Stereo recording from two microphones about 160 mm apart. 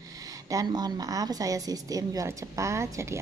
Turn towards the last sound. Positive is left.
turn(degrees=-15)  # may be behind; listen again after turning